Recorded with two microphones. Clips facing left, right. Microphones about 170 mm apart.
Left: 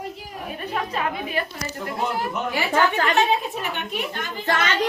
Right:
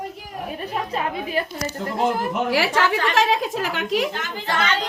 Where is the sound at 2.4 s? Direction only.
90° right.